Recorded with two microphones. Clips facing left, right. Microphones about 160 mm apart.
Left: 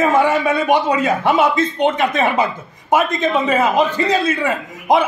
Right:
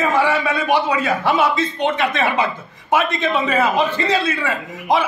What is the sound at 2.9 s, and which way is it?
A man's voice, 45° left (ahead or behind).